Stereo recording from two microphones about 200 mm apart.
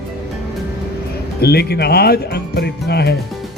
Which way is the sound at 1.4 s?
55° left (ahead or behind).